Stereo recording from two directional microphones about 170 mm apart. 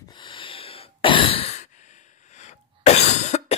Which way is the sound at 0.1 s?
30° left (ahead or behind).